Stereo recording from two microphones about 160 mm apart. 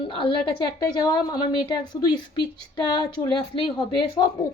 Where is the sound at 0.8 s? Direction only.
25° left (ahead or behind).